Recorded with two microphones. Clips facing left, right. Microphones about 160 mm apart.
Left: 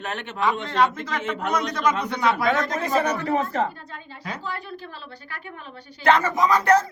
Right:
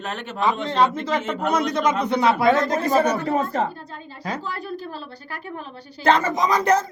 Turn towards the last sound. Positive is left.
turn(degrees=-20)  # may be behind; listen again after turning